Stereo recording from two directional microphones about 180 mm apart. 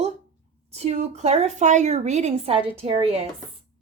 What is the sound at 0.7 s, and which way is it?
A woman's voice, 35° right (ahead or behind).